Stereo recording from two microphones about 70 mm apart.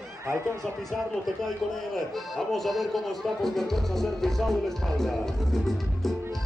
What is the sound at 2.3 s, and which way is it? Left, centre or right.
Speech, centre.